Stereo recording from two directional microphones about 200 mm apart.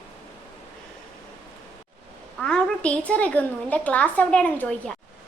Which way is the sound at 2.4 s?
5° left (ahead or behind).